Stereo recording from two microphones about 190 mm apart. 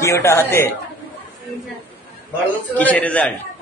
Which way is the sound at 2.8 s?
10° left (ahead or behind).